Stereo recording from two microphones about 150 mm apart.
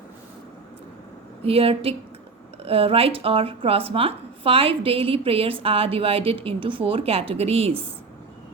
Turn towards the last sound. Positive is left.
turn(degrees=-40)  # may be behind; listen again after turning